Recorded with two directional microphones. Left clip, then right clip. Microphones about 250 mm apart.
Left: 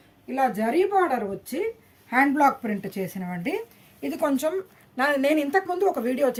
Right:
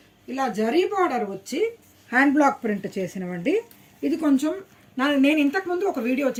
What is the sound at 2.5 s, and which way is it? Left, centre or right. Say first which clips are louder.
Speech: right 1 dB; left.